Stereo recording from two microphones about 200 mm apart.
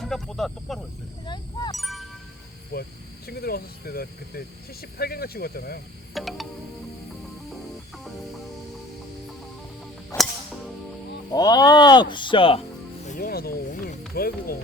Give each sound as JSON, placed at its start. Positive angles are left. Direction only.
{"t": 0.0, "sound": "speech", "side_deg": 5}
{"t": 1.2, "sound": "speech", "side_deg": 20}
{"t": 1.7, "sound": "wind chime", "side_deg": 0}
{"t": 2.7, "sound": "speech", "side_deg": 50}
{"t": 6.1, "sound": "speech", "side_deg": 0}
{"t": 10.1, "sound": "cap gun", "side_deg": 15}
{"t": 11.3, "sound": "speech", "side_deg": 20}
{"t": 13.1, "sound": "music", "side_deg": 45}
{"t": 14.2, "sound": "speech", "side_deg": 50}